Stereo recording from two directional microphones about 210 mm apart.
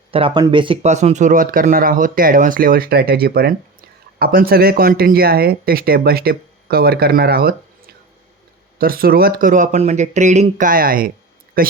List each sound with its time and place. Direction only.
0.1 s speech: 25° right (ahead or behind); by 7.5 s 45° right (ahead or behind)
8.8 s speech: 45° right (ahead or behind)